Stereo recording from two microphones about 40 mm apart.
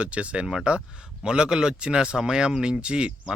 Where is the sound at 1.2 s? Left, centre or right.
Right.